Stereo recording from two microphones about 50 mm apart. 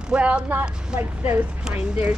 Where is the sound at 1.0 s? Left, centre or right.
Right.